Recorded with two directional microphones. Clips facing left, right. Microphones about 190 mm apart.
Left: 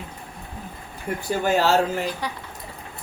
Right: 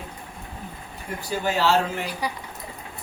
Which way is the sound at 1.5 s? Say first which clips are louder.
Left 2 dB; 45° left (ahead or behind).